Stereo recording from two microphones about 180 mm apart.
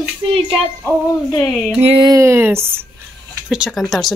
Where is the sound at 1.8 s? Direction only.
30° right (ahead or behind).